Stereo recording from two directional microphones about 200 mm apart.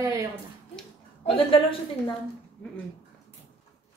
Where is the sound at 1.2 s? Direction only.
25° left (ahead or behind).